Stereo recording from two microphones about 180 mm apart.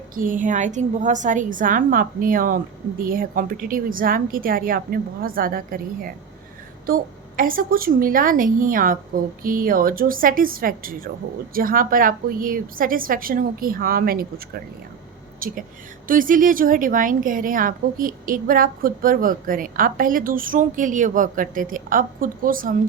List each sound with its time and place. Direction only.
0.1 s a woman's voice: 50° right (ahead or behind)